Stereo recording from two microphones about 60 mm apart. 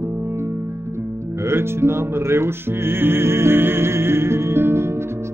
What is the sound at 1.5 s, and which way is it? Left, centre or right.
Music, right.